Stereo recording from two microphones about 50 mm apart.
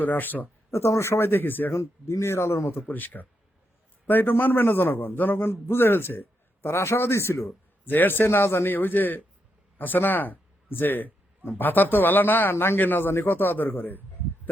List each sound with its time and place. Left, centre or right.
0.0 s a man's voice: left
0.7 s speech: left
1.3 s a man's voice: left
1.7 s speech: left
2.8 s a man's voice: left
7.4 s a man's voice: left
12.8 s a man's voice: left